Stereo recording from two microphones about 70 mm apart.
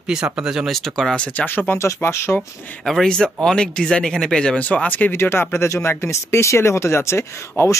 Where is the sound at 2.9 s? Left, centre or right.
Centre.